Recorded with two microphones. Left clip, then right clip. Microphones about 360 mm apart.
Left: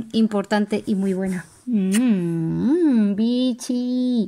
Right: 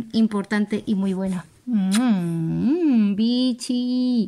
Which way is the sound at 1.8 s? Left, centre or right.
Right.